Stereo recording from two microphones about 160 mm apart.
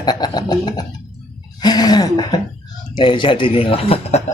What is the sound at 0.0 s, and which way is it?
A man's voice, 25° left (ahead or behind).